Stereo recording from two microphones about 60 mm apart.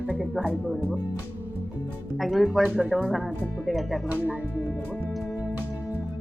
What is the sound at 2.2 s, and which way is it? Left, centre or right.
Speech, centre.